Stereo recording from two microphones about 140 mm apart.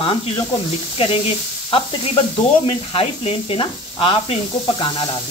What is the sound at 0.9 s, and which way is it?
Speech, 40° left (ahead or behind).